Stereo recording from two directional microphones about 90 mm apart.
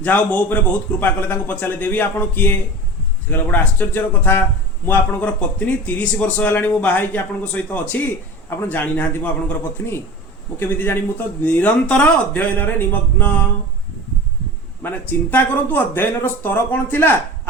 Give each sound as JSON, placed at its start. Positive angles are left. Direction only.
{"t": 0.0, "sound": "speech", "side_deg": 20}
{"t": 14.8, "sound": "speech", "side_deg": 25}